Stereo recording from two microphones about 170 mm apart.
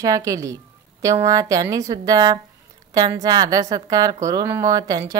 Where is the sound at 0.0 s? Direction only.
20° right (ahead or behind).